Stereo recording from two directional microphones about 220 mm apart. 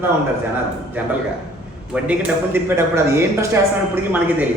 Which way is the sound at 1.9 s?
5° right (ahead or behind).